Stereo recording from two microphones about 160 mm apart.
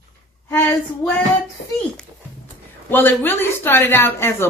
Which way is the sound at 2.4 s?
10° left (ahead or behind).